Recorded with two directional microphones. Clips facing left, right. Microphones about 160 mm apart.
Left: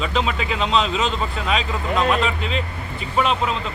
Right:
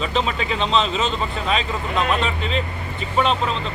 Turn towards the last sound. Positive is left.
turn(degrees=5)  # may be behind; listen again after turning